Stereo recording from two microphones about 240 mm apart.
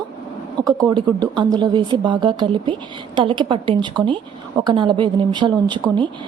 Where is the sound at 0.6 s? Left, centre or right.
Centre.